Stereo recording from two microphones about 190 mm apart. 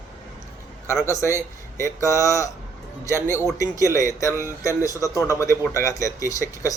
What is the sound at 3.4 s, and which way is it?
A man's voice, 15° left (ahead or behind).